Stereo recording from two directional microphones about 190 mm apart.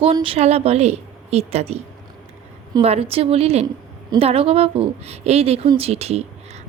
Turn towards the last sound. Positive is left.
turn(degrees=-35)  # may be behind; listen again after turning